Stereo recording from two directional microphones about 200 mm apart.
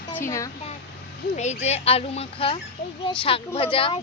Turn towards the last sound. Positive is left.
turn(degrees=25)  # may be behind; listen again after turning